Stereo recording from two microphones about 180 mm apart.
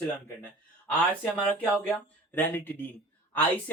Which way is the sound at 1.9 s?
10° left (ahead or behind).